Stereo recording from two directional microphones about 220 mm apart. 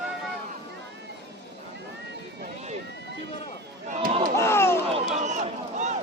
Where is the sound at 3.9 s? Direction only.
35° right (ahead or behind).